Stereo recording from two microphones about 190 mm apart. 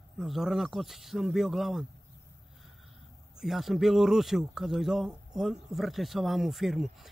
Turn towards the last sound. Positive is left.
turn(degrees=0)  # may be behind; listen again after turning